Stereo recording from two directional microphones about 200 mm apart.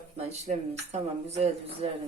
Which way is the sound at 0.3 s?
35° right (ahead or behind).